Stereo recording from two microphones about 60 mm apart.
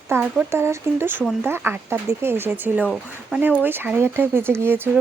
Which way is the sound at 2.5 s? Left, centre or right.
Right.